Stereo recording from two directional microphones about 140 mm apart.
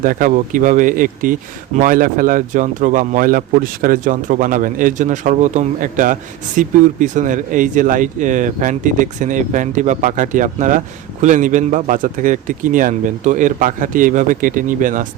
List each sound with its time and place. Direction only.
0.0 s speech: 80° right